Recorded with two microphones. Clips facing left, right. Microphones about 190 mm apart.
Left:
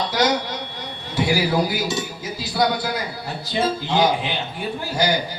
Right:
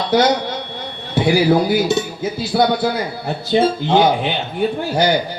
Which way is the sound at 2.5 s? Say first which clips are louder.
Right 5 dB; 60° right (ahead or behind).